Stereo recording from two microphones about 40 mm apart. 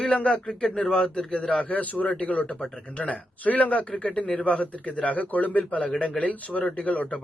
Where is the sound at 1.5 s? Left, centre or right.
Left.